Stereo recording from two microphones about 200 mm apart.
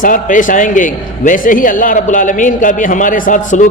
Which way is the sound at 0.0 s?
40° left (ahead or behind).